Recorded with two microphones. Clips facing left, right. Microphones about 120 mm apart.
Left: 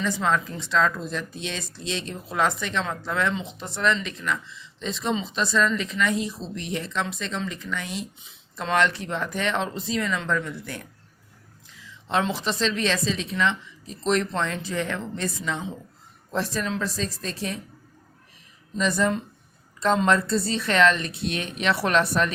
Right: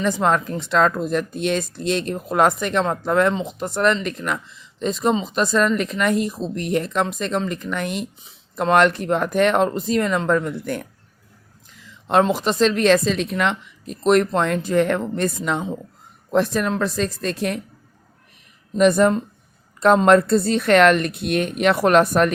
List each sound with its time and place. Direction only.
0.0 s a woman's voice: 55° right (ahead or behind)
18.8 s a woman's voice: 55° right (ahead or behind)